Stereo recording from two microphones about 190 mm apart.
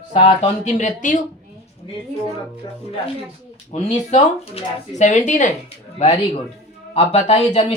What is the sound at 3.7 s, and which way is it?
Speech, 35° left (ahead or behind).